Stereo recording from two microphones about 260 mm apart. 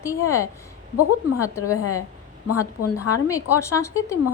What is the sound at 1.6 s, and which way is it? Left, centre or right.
Speech, left.